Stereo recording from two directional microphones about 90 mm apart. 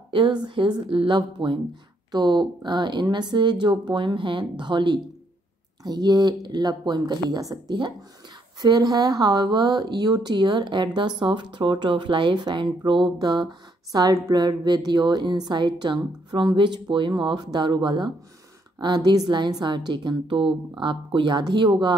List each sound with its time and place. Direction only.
0.1 s speech: 60° right (ahead or behind)
0.8 s speech: 70° right (ahead or behind); by 21.6 s 55° right (ahead or behind)